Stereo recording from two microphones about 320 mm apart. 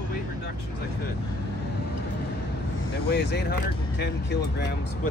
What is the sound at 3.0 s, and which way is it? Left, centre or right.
Speech, left.